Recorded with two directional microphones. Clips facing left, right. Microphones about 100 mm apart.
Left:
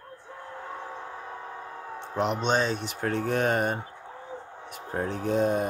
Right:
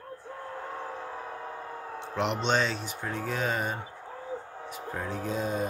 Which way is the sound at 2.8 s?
70° left (ahead or behind).